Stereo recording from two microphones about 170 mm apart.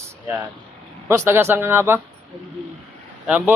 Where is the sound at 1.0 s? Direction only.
15° right (ahead or behind).